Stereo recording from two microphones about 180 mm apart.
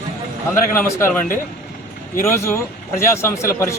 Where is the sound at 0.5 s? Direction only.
15° left (ahead or behind).